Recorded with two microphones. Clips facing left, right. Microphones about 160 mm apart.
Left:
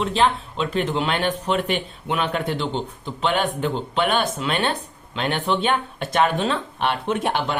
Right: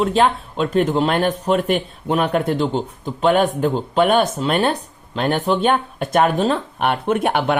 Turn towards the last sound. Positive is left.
turn(degrees=-55)  # may be behind; listen again after turning